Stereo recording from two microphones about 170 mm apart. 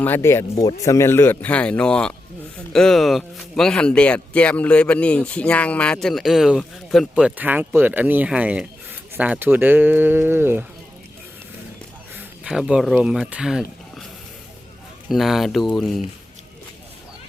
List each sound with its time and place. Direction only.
0.0 s speech: 15° left (ahead or behind); by 10.7 s 10° right (ahead or behind)
12.1 s speech: 5° right (ahead or behind)
15.1 s speech: centre (ahead or behind)